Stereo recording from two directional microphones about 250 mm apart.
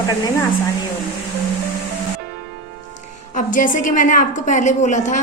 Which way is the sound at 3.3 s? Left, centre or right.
Left.